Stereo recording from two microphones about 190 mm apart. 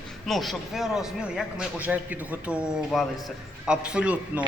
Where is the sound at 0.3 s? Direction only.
Centre (ahead or behind).